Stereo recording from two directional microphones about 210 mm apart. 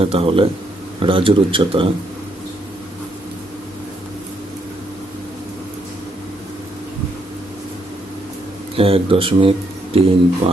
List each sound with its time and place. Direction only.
0.0 s speech: 25° right (ahead or behind)
8.7 s speech: 25° right (ahead or behind)